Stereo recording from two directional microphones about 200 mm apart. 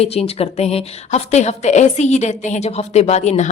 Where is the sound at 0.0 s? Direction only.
30° left (ahead or behind).